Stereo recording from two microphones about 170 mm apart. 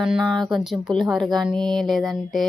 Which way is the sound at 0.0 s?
5° right (ahead or behind).